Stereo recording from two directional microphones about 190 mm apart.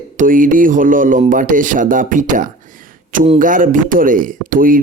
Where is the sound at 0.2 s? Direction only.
45° right (ahead or behind).